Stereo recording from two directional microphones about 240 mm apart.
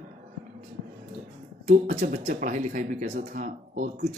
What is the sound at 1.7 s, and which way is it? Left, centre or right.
Speech, right.